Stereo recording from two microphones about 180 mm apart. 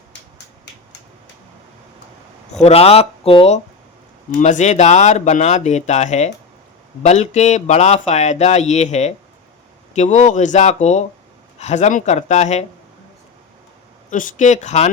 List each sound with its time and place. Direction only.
2.6 s speech: 35° left (ahead or behind)
14.1 s speech: 45° left (ahead or behind)